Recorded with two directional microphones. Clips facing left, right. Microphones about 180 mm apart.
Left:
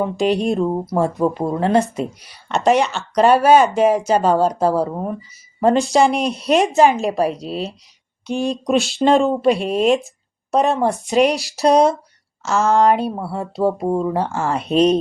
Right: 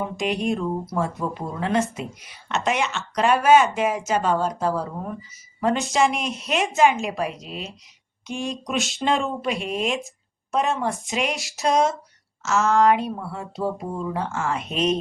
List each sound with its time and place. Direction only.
0.0 s speech: 35° left (ahead or behind)